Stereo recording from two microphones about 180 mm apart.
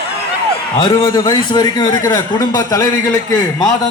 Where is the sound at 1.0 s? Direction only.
25° left (ahead or behind).